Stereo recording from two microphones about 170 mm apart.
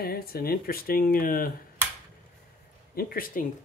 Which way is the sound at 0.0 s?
65° left (ahead or behind).